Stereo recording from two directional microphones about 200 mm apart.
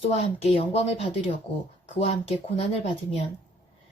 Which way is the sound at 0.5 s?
30° left (ahead or behind).